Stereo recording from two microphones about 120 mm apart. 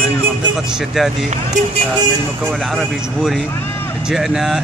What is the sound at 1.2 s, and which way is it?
Speech, 75° right (ahead or behind).